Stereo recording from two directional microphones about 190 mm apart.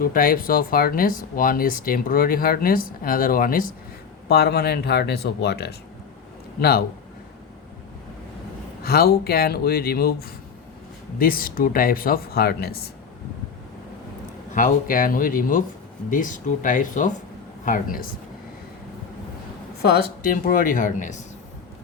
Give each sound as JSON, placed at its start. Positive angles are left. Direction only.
{"t": 0.0, "sound": "speech", "side_deg": 50}
{"t": 8.8, "sound": "speech", "side_deg": 55}
{"t": 14.5, "sound": "speech", "side_deg": 45}
{"t": 19.8, "sound": "speech", "side_deg": 50}